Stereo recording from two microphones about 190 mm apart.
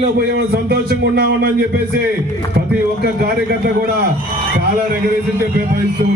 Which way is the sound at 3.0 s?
55° right (ahead or behind).